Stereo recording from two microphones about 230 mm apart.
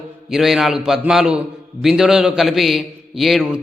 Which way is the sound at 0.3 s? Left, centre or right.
Centre.